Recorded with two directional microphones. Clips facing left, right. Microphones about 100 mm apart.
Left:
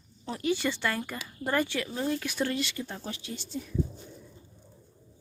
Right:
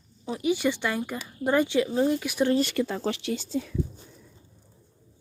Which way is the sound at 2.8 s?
85° right.